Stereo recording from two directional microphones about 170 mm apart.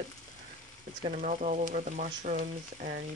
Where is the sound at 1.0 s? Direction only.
50° right (ahead or behind).